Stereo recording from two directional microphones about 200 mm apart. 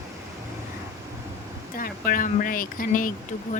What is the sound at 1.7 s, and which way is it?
Speech, 45° left (ahead or behind).